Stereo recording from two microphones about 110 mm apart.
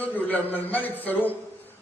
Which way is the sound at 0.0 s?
15° left (ahead or behind).